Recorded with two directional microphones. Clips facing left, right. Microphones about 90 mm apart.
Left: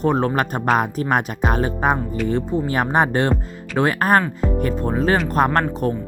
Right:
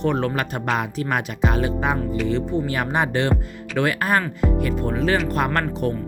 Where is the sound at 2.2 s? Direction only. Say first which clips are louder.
Left 3 dB; 40° left (ahead or behind).